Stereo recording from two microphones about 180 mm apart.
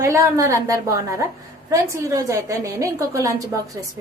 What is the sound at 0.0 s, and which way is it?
A woman's voice, 15° right (ahead or behind).